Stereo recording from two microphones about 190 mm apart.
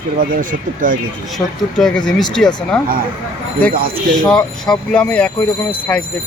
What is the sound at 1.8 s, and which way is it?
Speech, 5° left (ahead or behind).